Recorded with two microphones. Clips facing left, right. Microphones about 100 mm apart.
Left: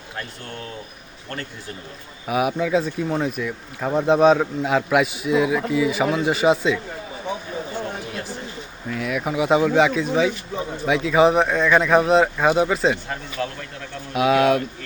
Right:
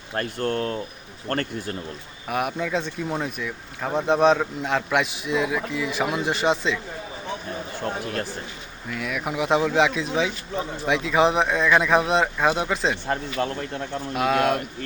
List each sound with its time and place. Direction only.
0.2 s speech: 50° right (ahead or behind)
2.2 s speech: 5° left (ahead or behind)
8.9 s speech: centre (ahead or behind)
13.4 s speech: 30° right (ahead or behind)
14.1 s speech: centre (ahead or behind)